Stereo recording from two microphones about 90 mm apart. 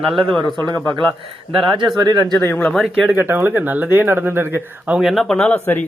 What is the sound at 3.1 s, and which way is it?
Speech, 25° right (ahead or behind).